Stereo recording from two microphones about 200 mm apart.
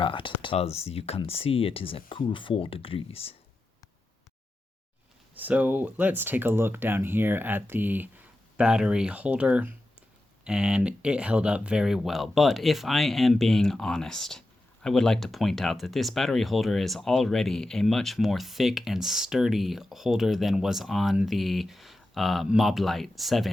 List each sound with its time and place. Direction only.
0.0 s speech: 25° left (ahead or behind)
5.3 s speech: 10° right (ahead or behind)